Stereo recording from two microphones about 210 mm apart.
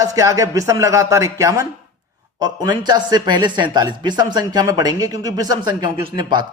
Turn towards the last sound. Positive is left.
turn(degrees=-20)  # may be behind; listen again after turning